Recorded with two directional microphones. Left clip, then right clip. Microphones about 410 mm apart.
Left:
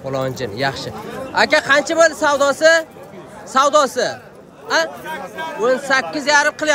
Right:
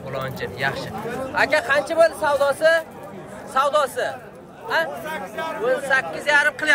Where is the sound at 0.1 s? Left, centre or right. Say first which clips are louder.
Left 6 dB; centre.